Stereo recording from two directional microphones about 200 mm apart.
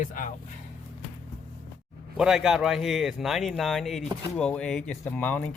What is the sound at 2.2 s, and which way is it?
Speech, centre (ahead or behind).